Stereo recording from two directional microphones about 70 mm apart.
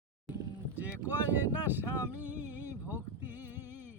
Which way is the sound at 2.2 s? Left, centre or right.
Right.